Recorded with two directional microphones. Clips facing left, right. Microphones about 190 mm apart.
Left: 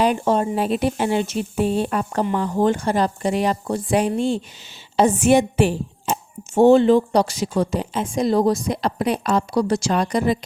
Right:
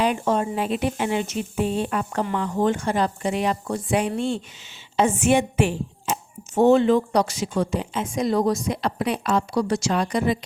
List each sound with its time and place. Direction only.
0.0 s a woman's voice: 35° left (ahead or behind)